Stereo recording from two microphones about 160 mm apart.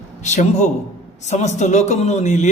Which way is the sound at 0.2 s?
45° left (ahead or behind).